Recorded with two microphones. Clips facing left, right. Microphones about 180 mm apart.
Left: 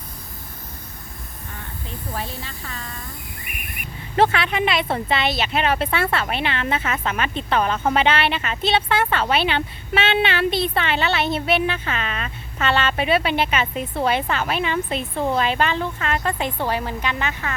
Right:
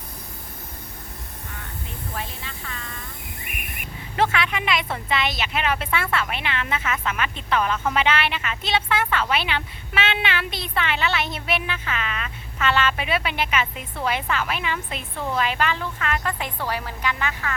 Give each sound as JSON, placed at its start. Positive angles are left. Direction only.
{"t": 2.1, "sound": "a woman's voice", "side_deg": 35}
{"t": 4.2, "sound": "a woman's voice", "side_deg": 35}